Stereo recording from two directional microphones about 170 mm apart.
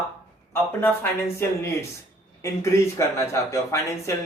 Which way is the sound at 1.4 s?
15° left (ahead or behind).